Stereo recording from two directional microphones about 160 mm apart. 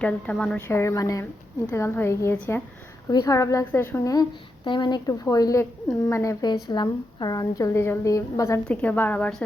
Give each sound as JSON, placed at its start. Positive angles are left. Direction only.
{"t": 0.0, "sound": "a woman's voice", "side_deg": 10}
{"t": 0.7, "sound": "a woman's voice", "side_deg": 15}